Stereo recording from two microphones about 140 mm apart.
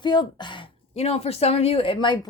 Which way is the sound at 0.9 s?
45° left (ahead or behind).